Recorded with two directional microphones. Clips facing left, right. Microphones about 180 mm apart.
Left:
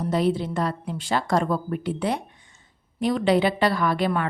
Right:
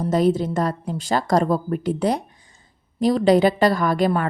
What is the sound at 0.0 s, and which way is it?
A woman's voice, 45° right (ahead or behind).